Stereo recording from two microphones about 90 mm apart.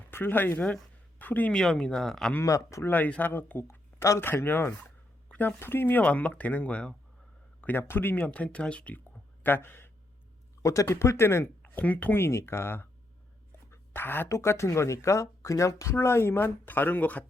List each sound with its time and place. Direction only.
0.1 s speech: 20° left (ahead or behind); by 2.3 s 5° left (ahead or behind)
2.4 s speech: 35° left (ahead or behind)
2.9 s speech: 20° left (ahead or behind)
10.6 s speech: 35° left (ahead or behind)
11.6 s speech: 20° left (ahead or behind)
12.2 s speech: 30° left (ahead or behind)